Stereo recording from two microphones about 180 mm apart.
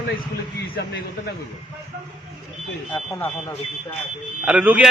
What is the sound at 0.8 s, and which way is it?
Speech, 65° left (ahead or behind).